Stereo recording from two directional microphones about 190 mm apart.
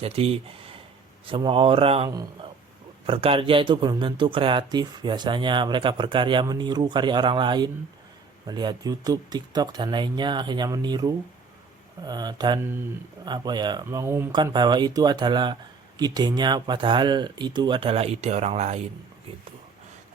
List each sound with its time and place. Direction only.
0.0 s speech: 30° right (ahead or behind)
2.0 s speech: 20° right (ahead or behind)
3.1 s speech: 30° right (ahead or behind)